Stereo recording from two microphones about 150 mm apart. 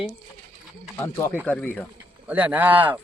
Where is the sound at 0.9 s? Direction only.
15° left (ahead or behind).